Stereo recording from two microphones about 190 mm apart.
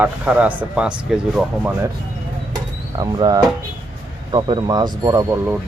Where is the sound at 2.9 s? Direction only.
20° right (ahead or behind).